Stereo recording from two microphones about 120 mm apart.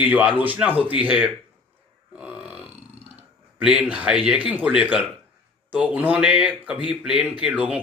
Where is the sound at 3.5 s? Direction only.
10° right (ahead or behind).